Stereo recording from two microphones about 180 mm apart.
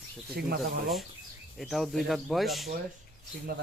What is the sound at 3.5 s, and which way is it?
Speech, 55° right (ahead or behind).